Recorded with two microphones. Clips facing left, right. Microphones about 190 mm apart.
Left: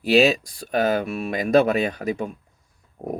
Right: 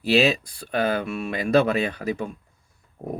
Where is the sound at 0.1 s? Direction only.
5° left (ahead or behind).